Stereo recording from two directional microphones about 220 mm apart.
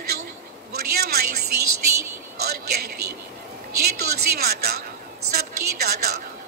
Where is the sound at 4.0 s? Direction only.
45° right (ahead or behind).